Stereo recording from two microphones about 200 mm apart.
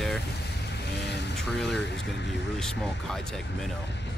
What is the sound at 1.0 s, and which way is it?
Vehicle, 55° left (ahead or behind).